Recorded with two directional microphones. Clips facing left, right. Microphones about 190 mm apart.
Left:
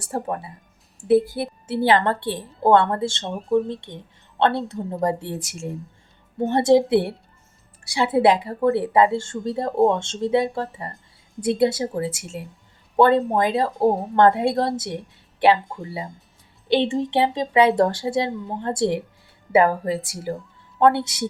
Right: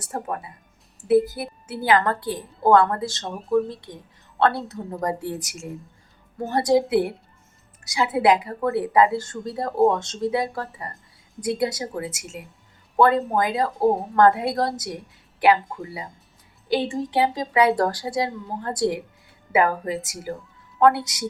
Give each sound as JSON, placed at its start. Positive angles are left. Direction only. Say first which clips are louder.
{"t": 0.0, "sound": "a woman's voice", "louder": "left 3 dB", "side_deg": 30}